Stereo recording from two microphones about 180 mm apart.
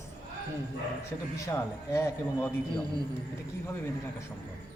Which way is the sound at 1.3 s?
15° left (ahead or behind).